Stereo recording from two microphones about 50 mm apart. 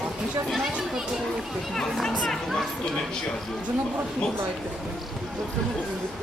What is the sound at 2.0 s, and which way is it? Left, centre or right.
Speech, centre.